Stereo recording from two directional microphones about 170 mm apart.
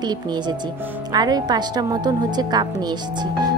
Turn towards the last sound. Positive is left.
turn(degrees=-25)  # may be behind; listen again after turning